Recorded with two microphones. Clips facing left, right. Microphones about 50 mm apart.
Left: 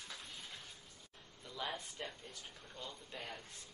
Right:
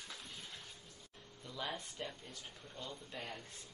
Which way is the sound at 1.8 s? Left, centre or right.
Centre.